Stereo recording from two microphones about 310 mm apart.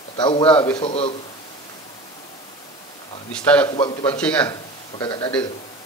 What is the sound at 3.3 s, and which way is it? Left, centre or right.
Speech, centre.